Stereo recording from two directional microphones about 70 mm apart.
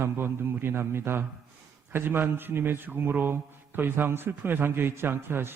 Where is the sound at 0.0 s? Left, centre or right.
Right.